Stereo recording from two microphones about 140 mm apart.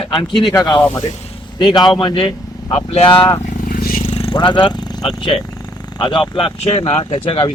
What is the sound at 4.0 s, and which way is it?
Vehicle, 45° left (ahead or behind).